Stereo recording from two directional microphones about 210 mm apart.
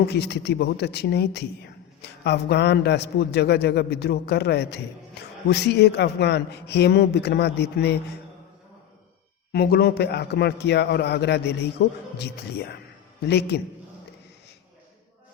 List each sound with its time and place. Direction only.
0.1 s speech: 55° left (ahead or behind)
9.5 s speech: 50° left (ahead or behind)